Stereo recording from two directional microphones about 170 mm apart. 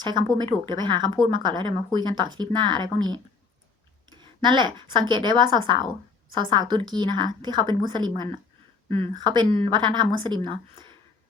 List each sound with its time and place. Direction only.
0.0 s speech: 25° right (ahead or behind)